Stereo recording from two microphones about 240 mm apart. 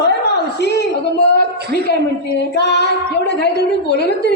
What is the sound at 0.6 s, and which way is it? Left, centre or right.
Speech, left.